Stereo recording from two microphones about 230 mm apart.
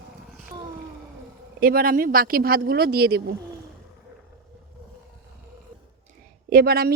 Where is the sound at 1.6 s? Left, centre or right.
Right.